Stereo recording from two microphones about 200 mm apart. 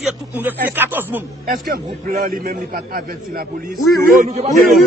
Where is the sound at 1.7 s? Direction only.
50° right (ahead or behind).